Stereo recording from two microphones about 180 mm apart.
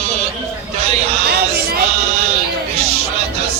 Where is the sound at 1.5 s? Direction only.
60° right (ahead or behind).